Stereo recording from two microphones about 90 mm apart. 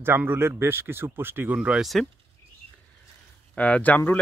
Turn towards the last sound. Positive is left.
turn(degrees=20)  # may be behind; listen again after turning